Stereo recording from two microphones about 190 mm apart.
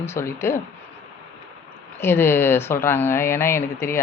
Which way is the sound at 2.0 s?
10° left (ahead or behind).